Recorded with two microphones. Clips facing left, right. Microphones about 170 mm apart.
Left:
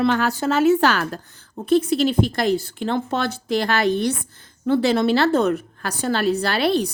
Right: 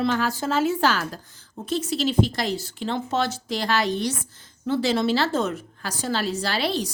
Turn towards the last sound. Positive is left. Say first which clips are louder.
# left 5 dB
turn(degrees=60)  # may be behind; listen again after turning